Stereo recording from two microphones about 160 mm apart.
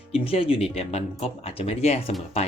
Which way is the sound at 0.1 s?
35° left (ahead or behind).